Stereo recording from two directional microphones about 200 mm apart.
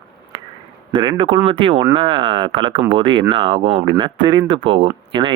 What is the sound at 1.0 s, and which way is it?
Speech, 20° right (ahead or behind).